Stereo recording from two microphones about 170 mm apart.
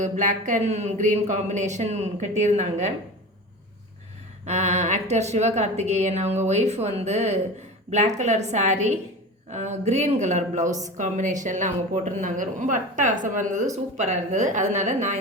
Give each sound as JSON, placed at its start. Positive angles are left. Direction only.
{"t": 0.0, "sound": "speech", "side_deg": -45}
{"t": 4.4, "sound": "a woman's voice", "side_deg": -45}